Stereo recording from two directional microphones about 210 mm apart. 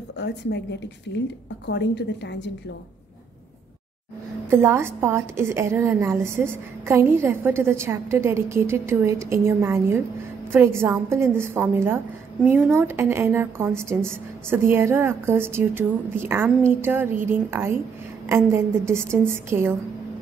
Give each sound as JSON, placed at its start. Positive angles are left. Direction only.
{"t": 0.2, "sound": "speech", "side_deg": 55}
{"t": 4.5, "sound": "a woman's voice", "side_deg": -10}